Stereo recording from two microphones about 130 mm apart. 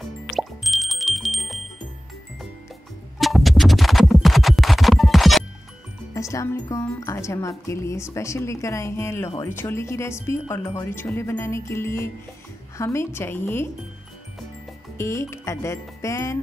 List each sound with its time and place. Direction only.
0.3 s music: centre (ahead or behind)
3.2 s music: centre (ahead or behind)
6.1 s music: 25° left (ahead or behind)
6.7 s speech: 25° left (ahead or behind)
15.0 s speech: 20° left (ahead or behind)